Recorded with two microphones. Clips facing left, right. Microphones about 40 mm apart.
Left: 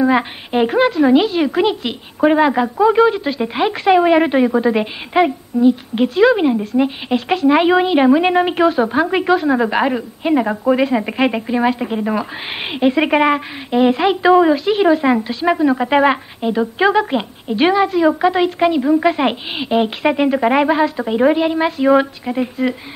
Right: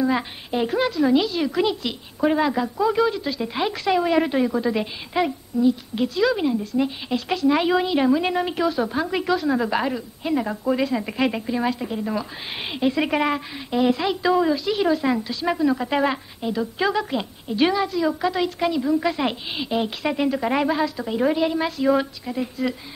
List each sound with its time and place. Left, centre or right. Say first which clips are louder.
0.0 s speech: left 7 dB; left